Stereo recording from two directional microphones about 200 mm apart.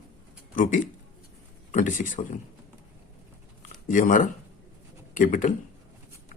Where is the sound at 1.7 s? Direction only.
40° left (ahead or behind).